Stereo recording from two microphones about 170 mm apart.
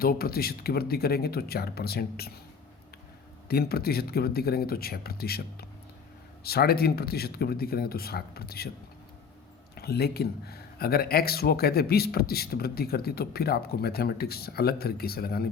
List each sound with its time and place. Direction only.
0.0 s speech: 60° left (ahead or behind)
3.5 s speech: 65° left (ahead or behind)
9.7 s speech: 70° left (ahead or behind)